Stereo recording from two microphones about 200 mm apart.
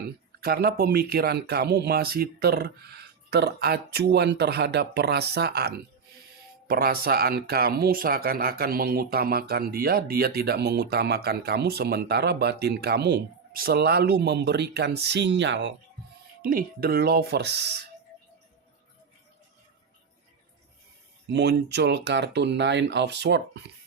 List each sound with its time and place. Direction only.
0.4 s speech: 50° right (ahead or behind)
16.4 s speech: 45° right (ahead or behind)
21.3 s speech: 55° right (ahead or behind)